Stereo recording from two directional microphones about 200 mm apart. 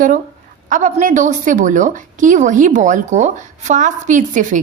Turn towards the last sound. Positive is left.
turn(degrees=-40)  # may be behind; listen again after turning